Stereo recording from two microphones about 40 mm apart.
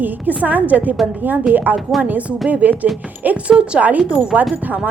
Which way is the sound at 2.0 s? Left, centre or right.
Right.